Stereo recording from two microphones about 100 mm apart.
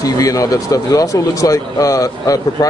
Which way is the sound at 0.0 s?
35° left (ahead or behind).